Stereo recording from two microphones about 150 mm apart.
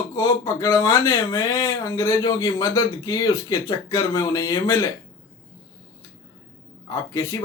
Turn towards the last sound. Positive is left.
turn(degrees=20)  # may be behind; listen again after turning